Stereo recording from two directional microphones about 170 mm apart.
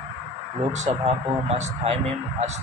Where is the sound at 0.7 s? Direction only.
40° right (ahead or behind).